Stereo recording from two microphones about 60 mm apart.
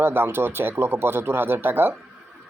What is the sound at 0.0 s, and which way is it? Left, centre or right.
Speech, right.